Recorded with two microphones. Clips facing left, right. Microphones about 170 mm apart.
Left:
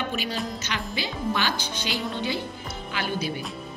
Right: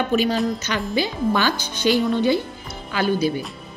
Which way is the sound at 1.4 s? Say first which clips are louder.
Right 7 dB; 45° right (ahead or behind).